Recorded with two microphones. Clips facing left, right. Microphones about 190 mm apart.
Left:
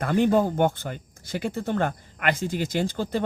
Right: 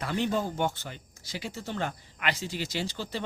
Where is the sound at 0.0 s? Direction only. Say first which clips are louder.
Left 8 dB; 50° left (ahead or behind).